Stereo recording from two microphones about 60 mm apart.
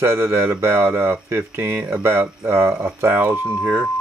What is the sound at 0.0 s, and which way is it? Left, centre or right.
Speech, right.